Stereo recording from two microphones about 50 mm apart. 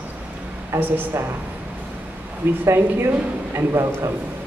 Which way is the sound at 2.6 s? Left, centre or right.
Right.